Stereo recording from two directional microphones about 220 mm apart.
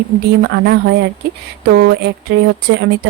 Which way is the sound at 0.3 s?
50° right (ahead or behind).